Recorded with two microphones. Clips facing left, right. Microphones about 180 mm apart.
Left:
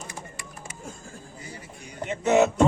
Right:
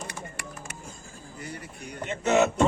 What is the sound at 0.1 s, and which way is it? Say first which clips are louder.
Music: right 1 dB; 70° right (ahead or behind).